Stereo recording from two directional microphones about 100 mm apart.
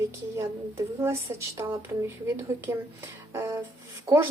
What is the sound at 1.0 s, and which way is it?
Speech, 25° right (ahead or behind).